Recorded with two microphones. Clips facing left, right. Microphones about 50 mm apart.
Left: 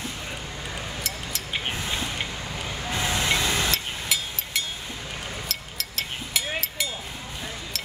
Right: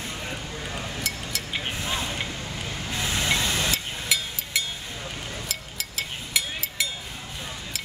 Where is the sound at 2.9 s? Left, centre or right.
Left.